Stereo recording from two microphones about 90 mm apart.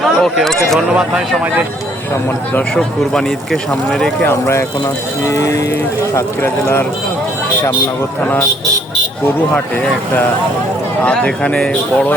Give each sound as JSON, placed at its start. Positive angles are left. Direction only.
{"t": 0.0, "sound": "speech", "side_deg": 0}
{"t": 0.9, "sound": "speech", "side_deg": -10}
{"t": 2.7, "sound": "speech", "side_deg": 5}
{"t": 4.3, "sound": "speech", "side_deg": 30}
{"t": 11.0, "sound": "speech", "side_deg": 15}